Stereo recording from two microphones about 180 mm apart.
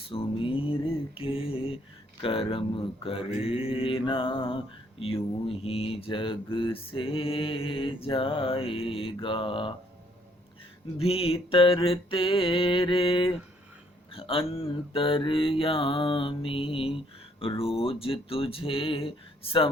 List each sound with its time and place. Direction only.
0.1 s a sound: 30° left (ahead or behind)
2.2 s mantra: 30° left (ahead or behind)
10.9 s mantra: 30° left (ahead or behind)
17.4 s speech: 30° left (ahead or behind)